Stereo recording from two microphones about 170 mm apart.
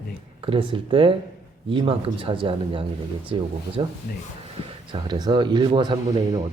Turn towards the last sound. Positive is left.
turn(degrees=-25)  # may be behind; listen again after turning